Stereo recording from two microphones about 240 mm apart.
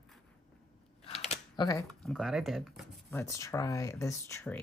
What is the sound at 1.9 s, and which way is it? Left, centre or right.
Speech, centre.